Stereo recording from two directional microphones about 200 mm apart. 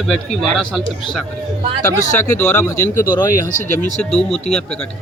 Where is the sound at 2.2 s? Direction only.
10° left (ahead or behind).